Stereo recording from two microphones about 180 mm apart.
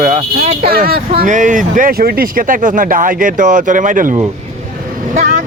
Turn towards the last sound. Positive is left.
turn(degrees=-45)  # may be behind; listen again after turning